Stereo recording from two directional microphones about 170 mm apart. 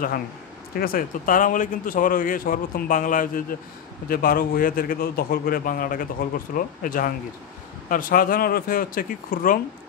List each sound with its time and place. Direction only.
0.7 s a man's voice: 60° left (ahead or behind)